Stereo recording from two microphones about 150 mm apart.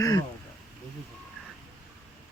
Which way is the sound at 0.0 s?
25° left (ahead or behind).